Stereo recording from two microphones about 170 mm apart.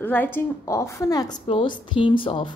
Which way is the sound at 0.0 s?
10° left (ahead or behind).